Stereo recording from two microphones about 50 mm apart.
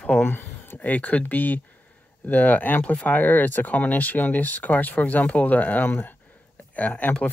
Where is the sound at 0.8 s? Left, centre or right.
Left.